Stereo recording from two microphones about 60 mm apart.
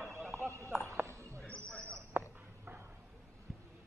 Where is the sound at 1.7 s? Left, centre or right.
Centre.